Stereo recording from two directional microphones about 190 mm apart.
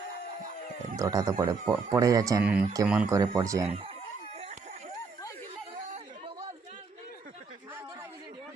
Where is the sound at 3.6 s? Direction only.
30° right (ahead or behind).